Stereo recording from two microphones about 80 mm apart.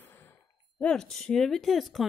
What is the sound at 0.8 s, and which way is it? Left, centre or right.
Speech, centre.